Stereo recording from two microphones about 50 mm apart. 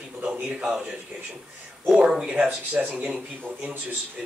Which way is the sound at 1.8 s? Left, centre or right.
Centre.